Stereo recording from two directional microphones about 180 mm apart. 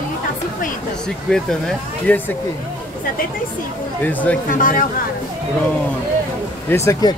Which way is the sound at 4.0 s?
10° left (ahead or behind).